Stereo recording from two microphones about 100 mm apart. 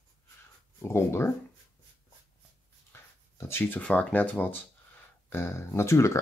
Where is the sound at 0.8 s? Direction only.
25° left (ahead or behind).